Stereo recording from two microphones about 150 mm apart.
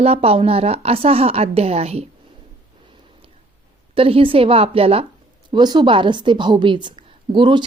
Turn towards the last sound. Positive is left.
turn(degrees=-30)  # may be behind; listen again after turning